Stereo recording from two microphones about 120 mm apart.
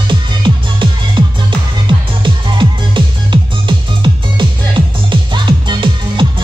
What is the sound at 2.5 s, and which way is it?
Music, 40° right (ahead or behind).